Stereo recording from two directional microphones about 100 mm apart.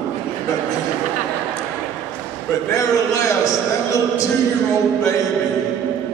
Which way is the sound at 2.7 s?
35° left (ahead or behind).